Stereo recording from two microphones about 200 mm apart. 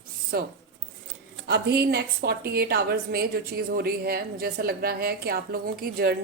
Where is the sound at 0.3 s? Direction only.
50° right (ahead or behind).